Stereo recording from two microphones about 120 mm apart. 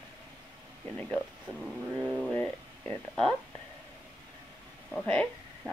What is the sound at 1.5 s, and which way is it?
Speech, 5° right (ahead or behind).